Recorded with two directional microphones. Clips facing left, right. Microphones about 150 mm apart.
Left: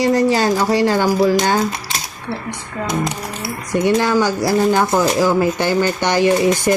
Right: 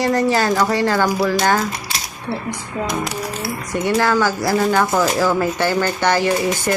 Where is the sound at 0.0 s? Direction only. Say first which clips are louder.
Left 2 dB; 20° left (ahead or behind).